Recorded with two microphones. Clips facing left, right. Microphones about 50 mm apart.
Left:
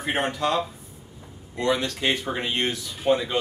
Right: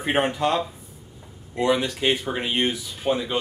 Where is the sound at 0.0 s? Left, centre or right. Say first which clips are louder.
Right 3 dB; right.